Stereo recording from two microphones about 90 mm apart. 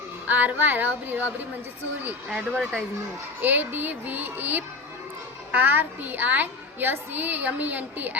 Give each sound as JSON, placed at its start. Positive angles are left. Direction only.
{"t": 0.3, "sound": "speech", "side_deg": -20}